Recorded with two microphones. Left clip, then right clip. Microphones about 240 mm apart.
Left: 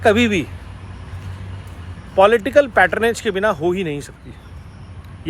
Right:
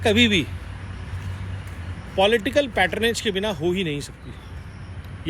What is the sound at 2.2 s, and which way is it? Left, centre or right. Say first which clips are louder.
Speech: left 6 dB; left.